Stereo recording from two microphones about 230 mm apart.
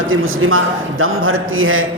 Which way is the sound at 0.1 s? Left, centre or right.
Right.